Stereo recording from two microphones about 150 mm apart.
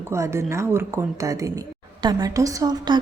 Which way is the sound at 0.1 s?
20° right (ahead or behind).